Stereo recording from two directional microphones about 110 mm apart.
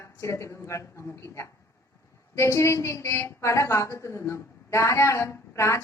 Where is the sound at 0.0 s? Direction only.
25° left (ahead or behind).